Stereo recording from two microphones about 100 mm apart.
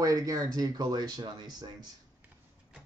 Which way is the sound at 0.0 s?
35° right (ahead or behind).